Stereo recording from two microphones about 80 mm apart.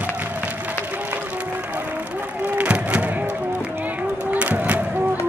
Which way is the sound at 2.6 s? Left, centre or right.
Centre.